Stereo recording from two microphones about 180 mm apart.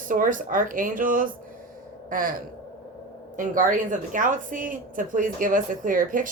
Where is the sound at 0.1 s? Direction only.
50° right (ahead or behind).